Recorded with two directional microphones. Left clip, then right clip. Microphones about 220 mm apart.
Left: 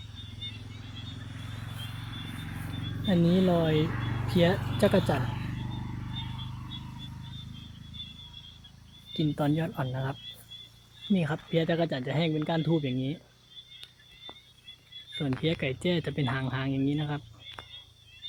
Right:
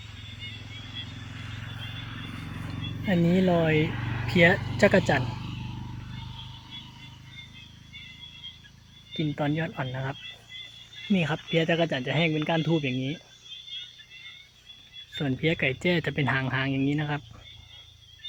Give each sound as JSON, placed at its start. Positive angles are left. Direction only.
{"t": 3.3, "sound": "speech", "side_deg": 0}
{"t": 3.8, "sound": "vehicle", "side_deg": -30}
{"t": 4.3, "sound": "speech", "side_deg": -5}
{"t": 9.1, "sound": "speech", "side_deg": 10}
{"t": 11.1, "sound": "speech", "side_deg": -5}
{"t": 15.2, "sound": "speech", "side_deg": -5}